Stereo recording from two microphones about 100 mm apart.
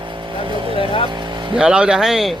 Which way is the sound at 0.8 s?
60° left (ahead or behind).